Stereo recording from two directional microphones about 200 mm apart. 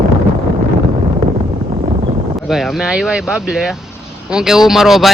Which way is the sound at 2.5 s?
Centre (ahead or behind).